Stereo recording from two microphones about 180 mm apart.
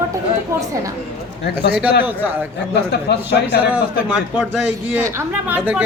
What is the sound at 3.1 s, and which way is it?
Speech, 70° left (ahead or behind).